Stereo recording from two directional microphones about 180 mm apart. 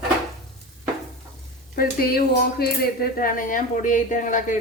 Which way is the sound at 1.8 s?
60° left (ahead or behind).